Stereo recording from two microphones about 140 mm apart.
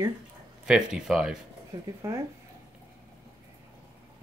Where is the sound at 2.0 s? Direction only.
20° right (ahead or behind).